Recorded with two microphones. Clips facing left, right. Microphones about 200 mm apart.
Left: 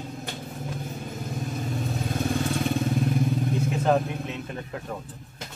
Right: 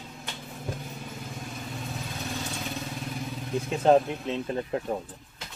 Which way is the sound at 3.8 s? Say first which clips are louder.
Right 5 dB; 30° right (ahead or behind).